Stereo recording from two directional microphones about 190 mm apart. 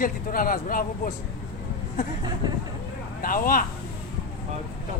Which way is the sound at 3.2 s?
45° left (ahead or behind).